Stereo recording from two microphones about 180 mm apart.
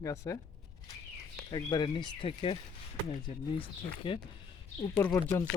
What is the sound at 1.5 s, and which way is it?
Speech, 25° left (ahead or behind).